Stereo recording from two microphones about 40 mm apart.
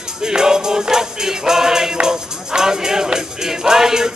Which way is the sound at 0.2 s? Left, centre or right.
Centre.